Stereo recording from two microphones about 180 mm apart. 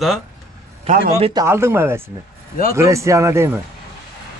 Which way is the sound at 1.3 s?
15° right (ahead or behind).